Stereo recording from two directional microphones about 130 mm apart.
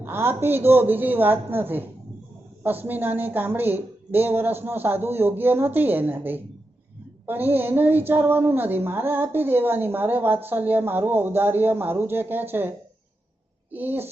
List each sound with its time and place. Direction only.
0.0 s a woman's voice: 15° right (ahead or behind)
13.7 s a woman's voice: 15° right (ahead or behind)